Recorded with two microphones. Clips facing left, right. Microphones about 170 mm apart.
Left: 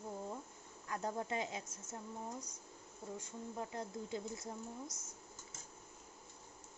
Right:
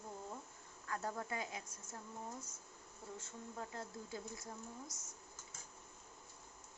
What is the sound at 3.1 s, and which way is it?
A woman's voice, 15° left (ahead or behind).